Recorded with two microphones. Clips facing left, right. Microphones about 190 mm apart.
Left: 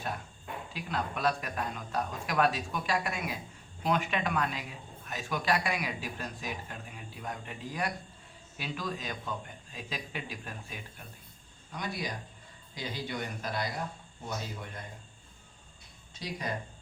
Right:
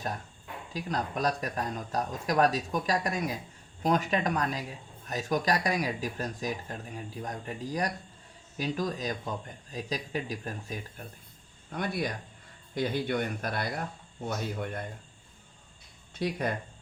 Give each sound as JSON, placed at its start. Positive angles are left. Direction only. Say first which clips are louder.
{"t": 0.7, "sound": "speech", "louder": "right 4 dB", "side_deg": -40}
{"t": 11.7, "sound": "speech", "louder": "right 5 dB", "side_deg": -55}
{"t": 16.1, "sound": "speech", "louder": "right 6 dB", "side_deg": -55}